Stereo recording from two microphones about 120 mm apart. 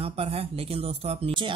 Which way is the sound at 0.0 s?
55° right (ahead or behind).